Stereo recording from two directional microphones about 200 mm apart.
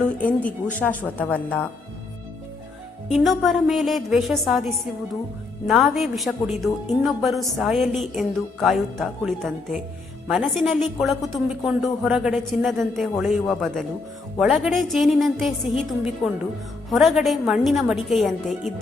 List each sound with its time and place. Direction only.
0.0 s speech: 5° left (ahead or behind)
3.1 s a woman's voice: centre (ahead or behind)